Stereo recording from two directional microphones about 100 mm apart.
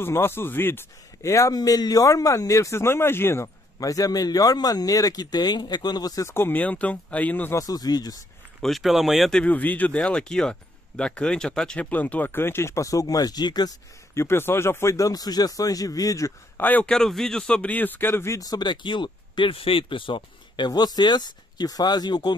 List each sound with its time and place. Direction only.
0.0 s speech: 25° left (ahead or behind)
6.3 s speech: 20° left (ahead or behind)
7.5 s speech: 40° left (ahead or behind)
8.5 s speech: centre (ahead or behind)
9.4 s speech: 15° left (ahead or behind); by 13.7 s 45° left (ahead or behind)
14.1 s speech: 25° left (ahead or behind)
16.5 s a man's voice: 15° left (ahead or behind)
16.9 s speech: 5° left (ahead or behind); by 18.4 s 25° left (ahead or behind)
18.4 s speech: 45° left (ahead or behind)